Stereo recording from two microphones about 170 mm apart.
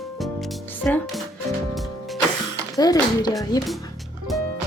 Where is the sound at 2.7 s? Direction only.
20° left (ahead or behind).